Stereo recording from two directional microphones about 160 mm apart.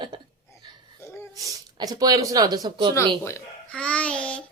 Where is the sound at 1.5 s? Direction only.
25° right (ahead or behind).